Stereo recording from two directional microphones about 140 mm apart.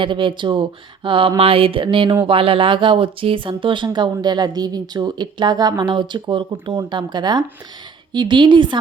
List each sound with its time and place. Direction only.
0.0 s speech: 35° right (ahead or behind)